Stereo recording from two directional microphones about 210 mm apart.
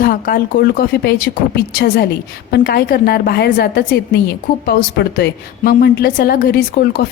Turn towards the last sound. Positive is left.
turn(degrees=45)  # may be behind; listen again after turning